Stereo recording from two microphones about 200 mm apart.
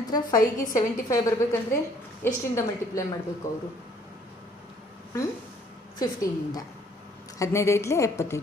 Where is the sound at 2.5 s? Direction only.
15° left (ahead or behind).